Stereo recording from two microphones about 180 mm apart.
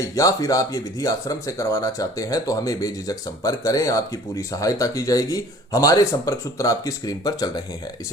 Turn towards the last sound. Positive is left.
turn(degrees=25)  # may be behind; listen again after turning